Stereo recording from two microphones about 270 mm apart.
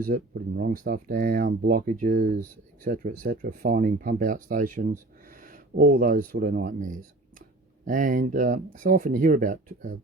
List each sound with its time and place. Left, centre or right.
0.0 s speech: right